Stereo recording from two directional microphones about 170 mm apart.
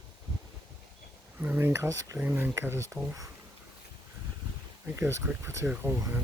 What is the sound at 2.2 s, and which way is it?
Speech, 10° right (ahead or behind).